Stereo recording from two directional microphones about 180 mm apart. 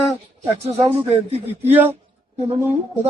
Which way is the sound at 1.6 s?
10° right (ahead or behind).